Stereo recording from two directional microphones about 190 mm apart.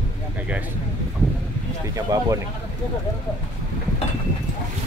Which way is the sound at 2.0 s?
15° right (ahead or behind).